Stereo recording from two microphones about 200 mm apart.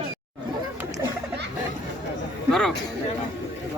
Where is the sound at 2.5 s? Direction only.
Centre (ahead or behind).